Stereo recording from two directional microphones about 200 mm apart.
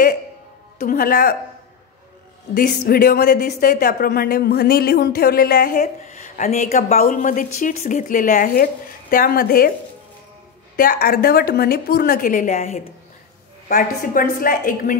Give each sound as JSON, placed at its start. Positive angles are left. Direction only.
{"t": 0.7, "sound": "speech", "side_deg": 45}
{"t": 2.5, "sound": "speech", "side_deg": 45}
{"t": 10.8, "sound": "speech", "side_deg": 45}
{"t": 13.7, "sound": "speech", "side_deg": 45}